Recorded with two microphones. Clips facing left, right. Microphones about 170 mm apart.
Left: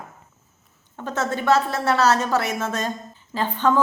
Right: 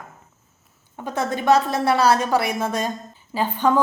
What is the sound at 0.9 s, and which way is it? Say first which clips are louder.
A woman's voice: right 1 dB; 15° right (ahead or behind).